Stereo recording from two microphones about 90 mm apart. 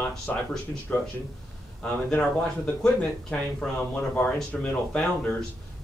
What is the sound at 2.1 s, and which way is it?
Speech, 15° left (ahead or behind).